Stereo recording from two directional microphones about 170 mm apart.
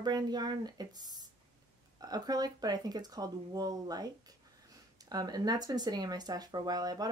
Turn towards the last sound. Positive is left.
turn(degrees=-20)  # may be behind; listen again after turning